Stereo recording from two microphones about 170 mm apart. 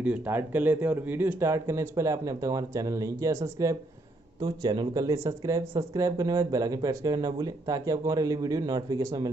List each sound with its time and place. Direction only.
0.0 s speech: 10° right (ahead or behind)